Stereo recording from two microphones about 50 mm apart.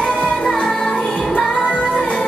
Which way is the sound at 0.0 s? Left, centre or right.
Left.